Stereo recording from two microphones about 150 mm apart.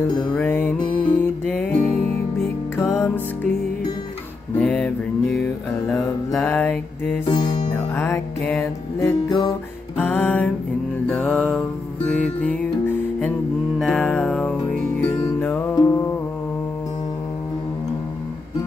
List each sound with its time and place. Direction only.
0.3 s music: 10° left (ahead or behind)
4.6 s music: 5° left (ahead or behind)